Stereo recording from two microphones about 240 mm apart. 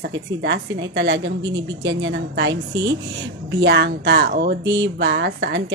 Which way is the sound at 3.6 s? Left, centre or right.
Right.